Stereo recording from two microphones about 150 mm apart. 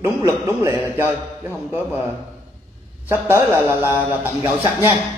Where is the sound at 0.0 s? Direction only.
15° right (ahead or behind).